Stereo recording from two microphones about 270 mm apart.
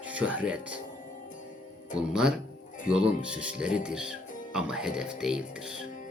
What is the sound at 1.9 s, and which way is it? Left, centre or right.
Speech, centre.